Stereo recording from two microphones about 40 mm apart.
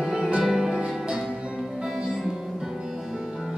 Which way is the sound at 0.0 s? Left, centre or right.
Centre.